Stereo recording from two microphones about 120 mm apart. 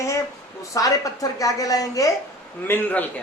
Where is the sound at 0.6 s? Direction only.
30° left (ahead or behind).